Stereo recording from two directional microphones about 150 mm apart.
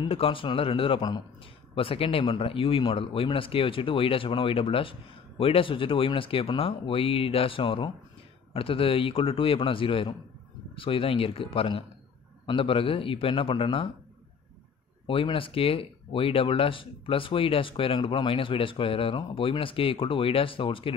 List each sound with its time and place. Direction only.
0.0 s speech: 35° left (ahead or behind)
15.0 s speech: 35° left (ahead or behind)